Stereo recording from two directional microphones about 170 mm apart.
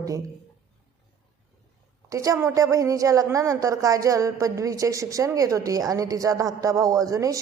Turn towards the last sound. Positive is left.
turn(degrees=-20)  # may be behind; listen again after turning